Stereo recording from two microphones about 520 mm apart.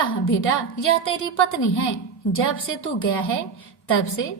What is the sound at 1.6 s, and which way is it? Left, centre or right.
Speech, left.